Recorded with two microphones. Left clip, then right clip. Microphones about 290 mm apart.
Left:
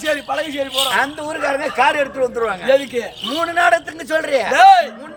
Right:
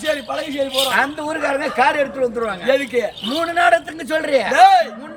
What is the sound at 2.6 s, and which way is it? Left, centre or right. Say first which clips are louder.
Speech: left 1 dB; centre.